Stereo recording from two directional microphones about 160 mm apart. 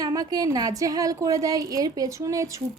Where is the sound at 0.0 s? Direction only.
20° right (ahead or behind).